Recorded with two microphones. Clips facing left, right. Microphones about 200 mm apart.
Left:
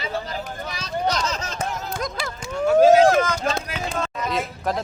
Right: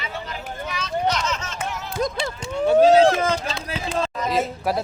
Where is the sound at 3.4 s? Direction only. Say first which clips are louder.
Left 5 dB; 45° left (ahead or behind).